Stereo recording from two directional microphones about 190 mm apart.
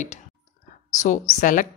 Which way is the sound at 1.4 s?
45° left (ahead or behind).